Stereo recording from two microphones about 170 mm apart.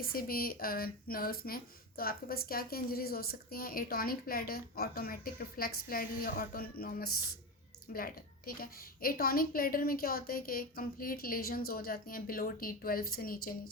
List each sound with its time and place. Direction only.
0.0 s speech: 60° left (ahead or behind)